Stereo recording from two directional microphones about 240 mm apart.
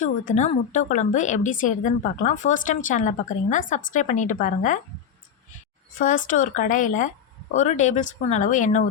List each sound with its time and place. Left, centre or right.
0.0 s a woman's voice: left
6.0 s a woman's voice: left